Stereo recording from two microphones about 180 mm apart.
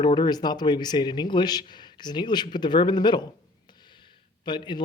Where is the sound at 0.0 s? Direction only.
25° left (ahead or behind).